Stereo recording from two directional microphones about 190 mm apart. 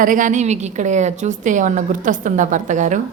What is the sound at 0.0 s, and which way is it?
A woman's voice, 45° right (ahead or behind).